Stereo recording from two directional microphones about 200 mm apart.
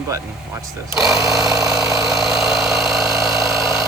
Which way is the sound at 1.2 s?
15° right (ahead or behind).